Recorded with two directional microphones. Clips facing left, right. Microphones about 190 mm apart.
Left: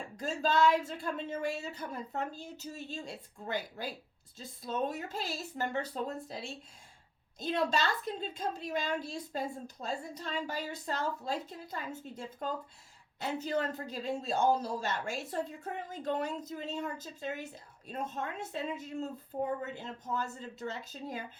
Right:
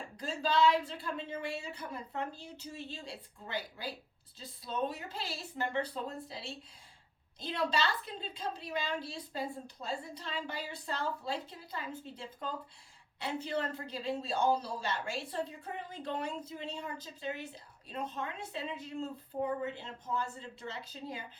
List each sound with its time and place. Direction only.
0.2 s speech: 45° left (ahead or behind)